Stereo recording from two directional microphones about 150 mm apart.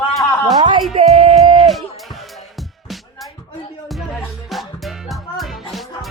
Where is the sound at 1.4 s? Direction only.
Centre (ahead or behind).